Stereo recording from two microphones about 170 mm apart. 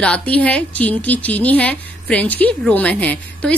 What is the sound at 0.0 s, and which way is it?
A woman's voice, 5° left (ahead or behind).